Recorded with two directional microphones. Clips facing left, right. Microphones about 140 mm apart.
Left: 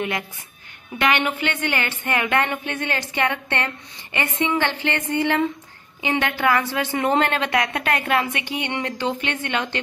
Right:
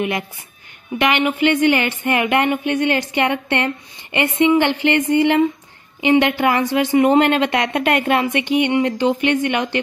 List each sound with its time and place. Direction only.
0.9 s speech: 15° right (ahead or behind)